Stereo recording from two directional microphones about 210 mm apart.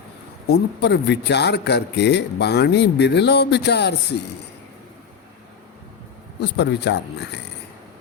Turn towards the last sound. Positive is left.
turn(degrees=55)  # may be behind; listen again after turning